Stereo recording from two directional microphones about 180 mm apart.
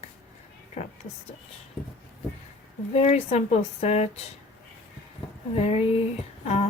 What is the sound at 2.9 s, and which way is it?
Speech, 35° left (ahead or behind).